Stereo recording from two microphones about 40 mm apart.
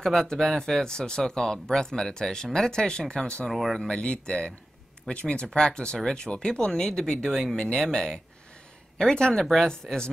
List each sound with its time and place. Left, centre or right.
0.0 s speech: centre
3.4 s speech: centre
4.0 s speech: left
7.2 s speech: centre